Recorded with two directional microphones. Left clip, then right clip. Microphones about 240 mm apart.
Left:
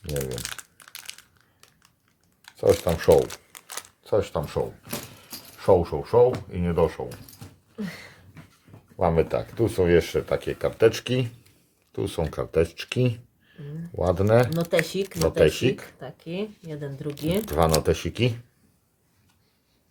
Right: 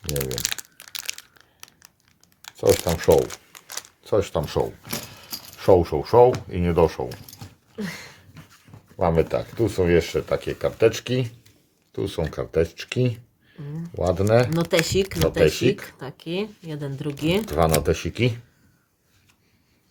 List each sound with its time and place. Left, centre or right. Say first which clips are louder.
0.0 s crumpling: right 3 dB; right
2.6 s speech: right 1 dB; centre
3.5 s a sound: right 2 dB; centre
4.0 s speech: right 2 dB; centre
7.8 s speech: right 4 dB; right
9.0 s speech: right 1 dB; centre
14.5 s speech: right 2 dB; right
15.3 s speech: even; centre
16.0 s speech: right 4 dB; right
17.4 s speech: left 1 dB; centre